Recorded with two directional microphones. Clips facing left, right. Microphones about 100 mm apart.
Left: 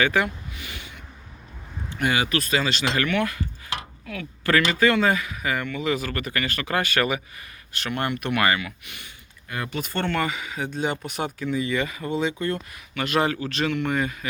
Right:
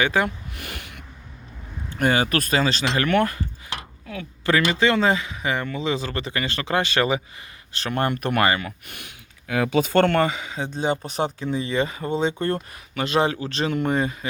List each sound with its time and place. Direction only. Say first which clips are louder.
0.0 s speech: right 1 dB; 25° right (ahead or behind)
0.5 s a sound: right 2 dB; 55° right (ahead or behind)
2.0 s speech: right 3 dB; 40° right (ahead or behind)
3.1 s speech: right 4 dB; 45° right (ahead or behind)
4.0 s speech: right 3 dB; 25° right (ahead or behind)
9.5 s speech: right 9 dB; 90° right
10.2 s speech: right 4 dB; 30° right (ahead or behind)
13.1 s speech: right 2 dB; 25° right (ahead or behind)